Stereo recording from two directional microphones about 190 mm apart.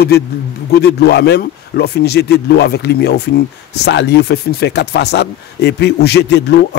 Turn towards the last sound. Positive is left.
turn(degrees=60)  # may be behind; listen again after turning